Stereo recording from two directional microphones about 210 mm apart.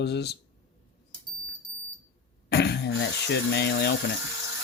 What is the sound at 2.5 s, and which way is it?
Speech, 50° left (ahead or behind).